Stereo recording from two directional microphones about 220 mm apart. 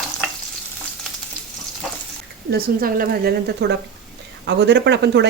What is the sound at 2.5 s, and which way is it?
A woman's voice, 40° right (ahead or behind).